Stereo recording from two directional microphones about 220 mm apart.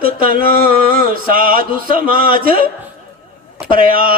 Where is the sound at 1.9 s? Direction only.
25° left (ahead or behind).